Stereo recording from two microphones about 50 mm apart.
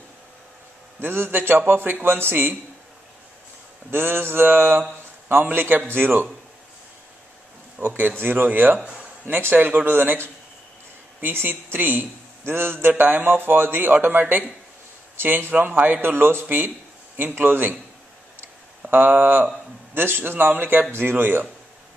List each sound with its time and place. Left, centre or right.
1.0 s a man's voice: right
3.9 s a man's voice: right
7.8 s a man's voice: right
11.3 s a man's voice: right
19.0 s speech: right
19.9 s a man's voice: right